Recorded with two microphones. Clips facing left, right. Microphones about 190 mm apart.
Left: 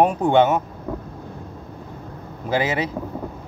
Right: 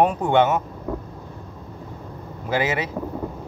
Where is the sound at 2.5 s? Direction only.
30° left (ahead or behind).